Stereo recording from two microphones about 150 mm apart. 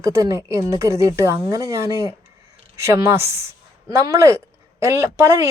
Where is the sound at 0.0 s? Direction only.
20° right (ahead or behind).